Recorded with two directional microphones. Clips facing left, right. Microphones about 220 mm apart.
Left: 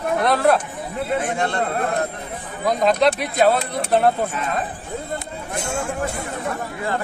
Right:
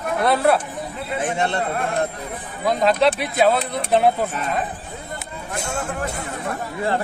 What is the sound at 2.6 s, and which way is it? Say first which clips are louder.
Speech: even; centre (ahead or behind).